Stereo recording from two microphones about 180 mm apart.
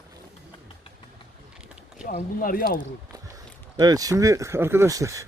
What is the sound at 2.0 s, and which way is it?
Speech, 50° left (ahead or behind).